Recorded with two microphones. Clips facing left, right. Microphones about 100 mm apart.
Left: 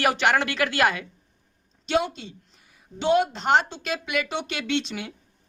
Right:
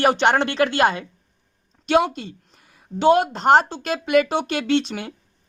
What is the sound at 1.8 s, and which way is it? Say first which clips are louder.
A woman's voice: right 6 dB; 55° right (ahead or behind).